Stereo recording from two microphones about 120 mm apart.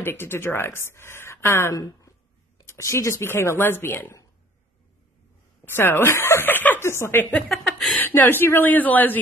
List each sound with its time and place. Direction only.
0.0 s speech: 15° left (ahead or behind)
5.7 s speech: 15° left (ahead or behind)
7.4 s speech: centre (ahead or behind)
8.0 s speech: 15° left (ahead or behind)